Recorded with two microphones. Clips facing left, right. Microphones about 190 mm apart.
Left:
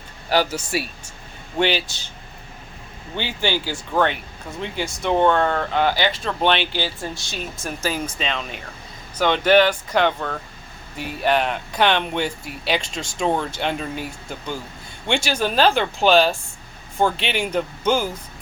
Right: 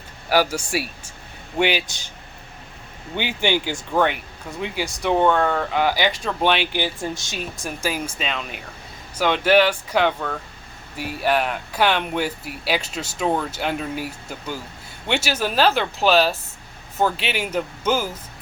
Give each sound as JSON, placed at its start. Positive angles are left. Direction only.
{"t": 0.3, "sound": "speech", "side_deg": -10}
{"t": 3.2, "sound": "speech", "side_deg": -15}